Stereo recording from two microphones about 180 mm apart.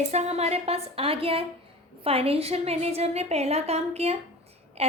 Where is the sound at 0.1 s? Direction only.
35° right (ahead or behind).